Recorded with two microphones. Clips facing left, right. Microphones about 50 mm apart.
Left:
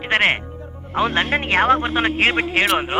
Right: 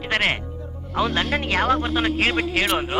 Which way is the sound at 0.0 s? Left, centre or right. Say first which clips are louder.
Left 4 dB; left.